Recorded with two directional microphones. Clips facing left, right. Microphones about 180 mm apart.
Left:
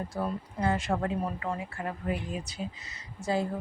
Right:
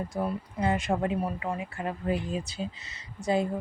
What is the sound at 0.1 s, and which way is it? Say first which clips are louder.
Speech: right 2 dB; 15° right (ahead or behind).